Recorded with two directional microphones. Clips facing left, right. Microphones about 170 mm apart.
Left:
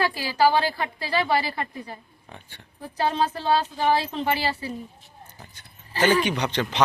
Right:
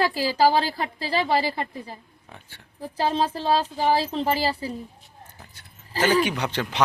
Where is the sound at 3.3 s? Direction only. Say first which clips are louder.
Even; 35° right (ahead or behind).